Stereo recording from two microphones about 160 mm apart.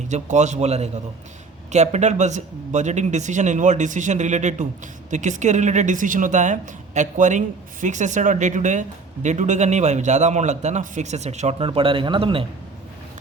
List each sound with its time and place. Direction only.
0.1 s a woman's voice: 50° right (ahead or behind)